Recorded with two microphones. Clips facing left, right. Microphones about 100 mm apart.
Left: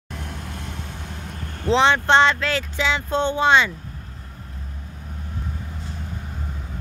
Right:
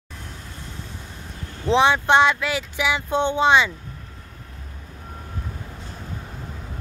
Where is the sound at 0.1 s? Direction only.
70° left (ahead or behind).